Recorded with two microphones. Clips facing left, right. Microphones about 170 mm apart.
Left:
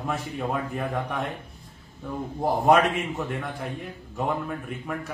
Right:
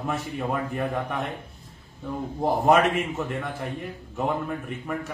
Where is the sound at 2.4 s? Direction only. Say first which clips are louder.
Even; centre (ahead or behind).